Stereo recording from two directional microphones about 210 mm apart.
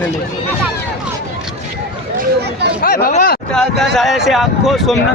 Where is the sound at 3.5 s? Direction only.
Centre (ahead or behind).